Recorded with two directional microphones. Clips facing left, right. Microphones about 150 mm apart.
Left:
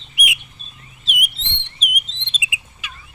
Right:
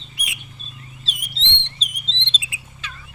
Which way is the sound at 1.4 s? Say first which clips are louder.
Right 5 dB; 90° right.